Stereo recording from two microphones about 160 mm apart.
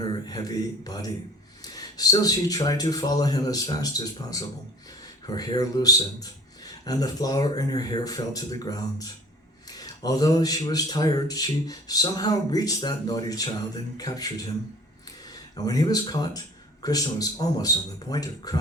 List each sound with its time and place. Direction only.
0.0 s a man's voice: 25° left (ahead or behind)